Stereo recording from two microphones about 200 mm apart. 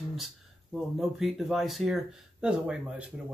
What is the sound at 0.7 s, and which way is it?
Speech, centre (ahead or behind).